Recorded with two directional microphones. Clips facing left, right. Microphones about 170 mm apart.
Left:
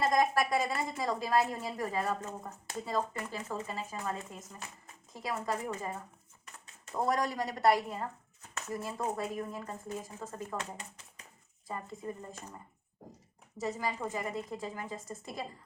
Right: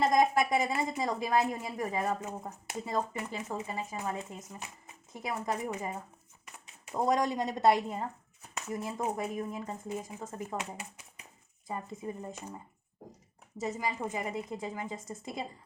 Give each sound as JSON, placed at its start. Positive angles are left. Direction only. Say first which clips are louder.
{"t": 0.0, "sound": "a woman's voice", "louder": "right 2 dB", "side_deg": -20}
{"t": 13.6, "sound": "a woman's voice", "louder": "right 1 dB", "side_deg": -20}